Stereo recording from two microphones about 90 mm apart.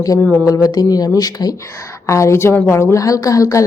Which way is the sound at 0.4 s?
40° left (ahead or behind).